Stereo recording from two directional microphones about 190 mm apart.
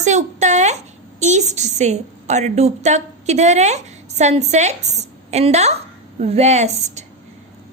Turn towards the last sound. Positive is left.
turn(degrees=-35)  # may be behind; listen again after turning